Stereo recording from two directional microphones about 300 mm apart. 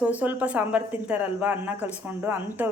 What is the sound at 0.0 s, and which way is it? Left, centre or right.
A woman's voice, centre.